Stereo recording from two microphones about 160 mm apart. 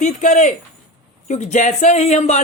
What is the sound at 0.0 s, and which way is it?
A woman's voice, 50° left (ahead or behind).